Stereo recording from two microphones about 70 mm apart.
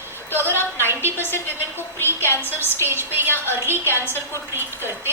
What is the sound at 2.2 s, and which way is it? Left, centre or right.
Speech, left.